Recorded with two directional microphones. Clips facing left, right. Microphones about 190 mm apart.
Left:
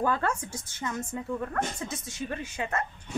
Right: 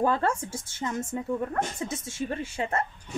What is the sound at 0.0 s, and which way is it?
Speech, 30° right (ahead or behind).